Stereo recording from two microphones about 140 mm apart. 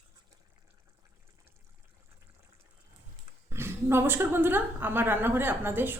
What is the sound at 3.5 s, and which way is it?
A woman's voice, 20° right (ahead or behind).